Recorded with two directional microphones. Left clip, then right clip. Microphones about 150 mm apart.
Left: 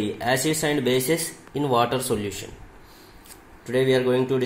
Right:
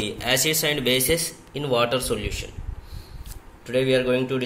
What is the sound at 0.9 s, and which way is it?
Speech, 70° left (ahead or behind).